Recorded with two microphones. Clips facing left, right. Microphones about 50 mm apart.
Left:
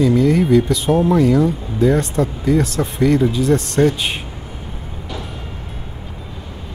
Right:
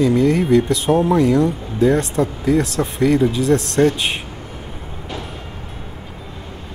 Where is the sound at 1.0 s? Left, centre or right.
Centre.